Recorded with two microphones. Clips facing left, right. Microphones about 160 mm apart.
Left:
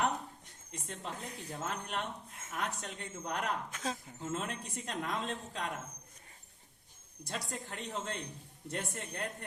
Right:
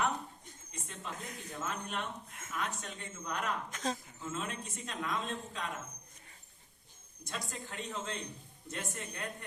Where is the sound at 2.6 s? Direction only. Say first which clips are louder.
Left 1 dB; 65° left (ahead or behind).